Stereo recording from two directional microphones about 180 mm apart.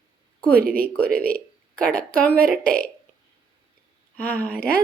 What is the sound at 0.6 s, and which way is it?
Speech, 55° right (ahead or behind).